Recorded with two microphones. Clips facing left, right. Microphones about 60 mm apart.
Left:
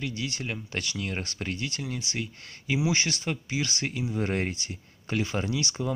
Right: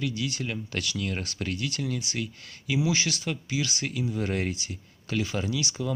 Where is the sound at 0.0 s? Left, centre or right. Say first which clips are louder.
Right 2 dB; left.